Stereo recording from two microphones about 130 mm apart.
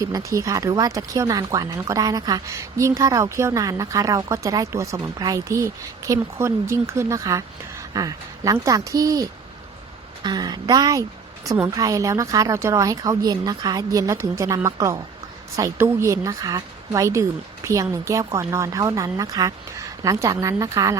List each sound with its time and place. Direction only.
0.0 s a woman's voice: 25° right (ahead or behind)